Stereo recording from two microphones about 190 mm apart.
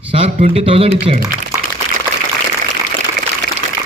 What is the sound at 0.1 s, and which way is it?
A man's voice, 30° right (ahead or behind).